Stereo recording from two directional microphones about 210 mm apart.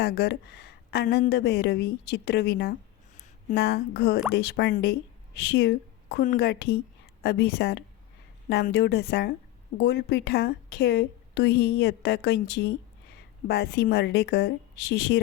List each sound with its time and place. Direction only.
0.0 s a woman's voice: 50° left (ahead or behind)